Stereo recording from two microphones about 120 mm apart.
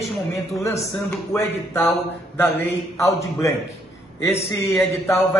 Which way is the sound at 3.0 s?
25° left (ahead or behind).